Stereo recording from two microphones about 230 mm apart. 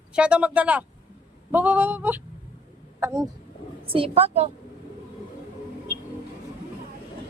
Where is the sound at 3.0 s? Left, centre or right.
Centre.